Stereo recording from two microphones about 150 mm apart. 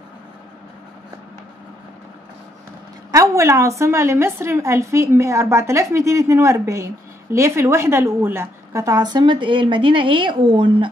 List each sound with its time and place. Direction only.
3.1 s a woman's voice: 20° right (ahead or behind)